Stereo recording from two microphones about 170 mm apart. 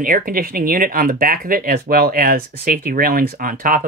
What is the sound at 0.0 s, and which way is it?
Speech, 55° right (ahead or behind).